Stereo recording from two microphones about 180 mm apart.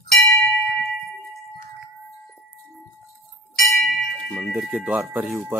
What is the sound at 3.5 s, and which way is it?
Bell, centre (ahead or behind).